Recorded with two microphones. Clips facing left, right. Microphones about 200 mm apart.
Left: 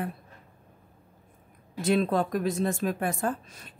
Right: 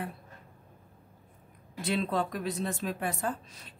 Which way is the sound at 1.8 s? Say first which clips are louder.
Left 5 dB; 45° left (ahead or behind).